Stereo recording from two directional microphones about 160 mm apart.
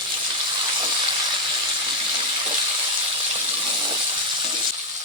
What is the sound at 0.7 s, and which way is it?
Frying, 30° right (ahead or behind).